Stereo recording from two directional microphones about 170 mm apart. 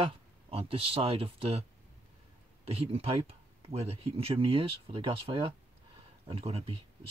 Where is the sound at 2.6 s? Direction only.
35° right (ahead or behind).